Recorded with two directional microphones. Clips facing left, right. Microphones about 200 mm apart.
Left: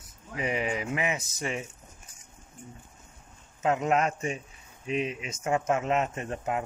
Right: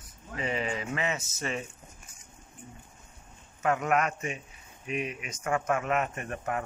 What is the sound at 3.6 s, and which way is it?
Speech, 20° left (ahead or behind).